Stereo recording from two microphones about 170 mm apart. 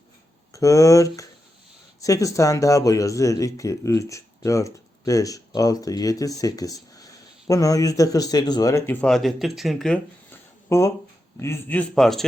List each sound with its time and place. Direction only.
0.5 s speech: 20° left (ahead or behind); by 10.0 s centre (ahead or behind)
10.7 s a man's voice: 15° left (ahead or behind); by 12.2 s centre (ahead or behind)